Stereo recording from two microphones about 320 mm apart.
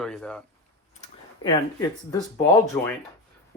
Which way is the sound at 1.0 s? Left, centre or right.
Centre.